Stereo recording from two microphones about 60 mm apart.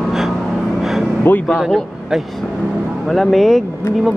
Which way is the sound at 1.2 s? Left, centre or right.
Left.